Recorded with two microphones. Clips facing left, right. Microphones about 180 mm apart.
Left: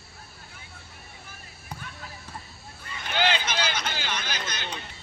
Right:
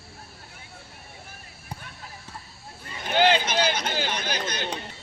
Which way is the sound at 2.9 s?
45° right (ahead or behind).